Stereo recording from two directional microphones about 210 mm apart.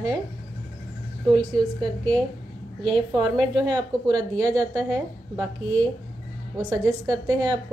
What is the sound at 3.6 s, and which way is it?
A woman's voice, 20° right (ahead or behind).